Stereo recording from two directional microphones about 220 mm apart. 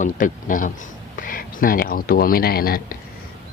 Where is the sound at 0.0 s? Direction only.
35° left (ahead or behind).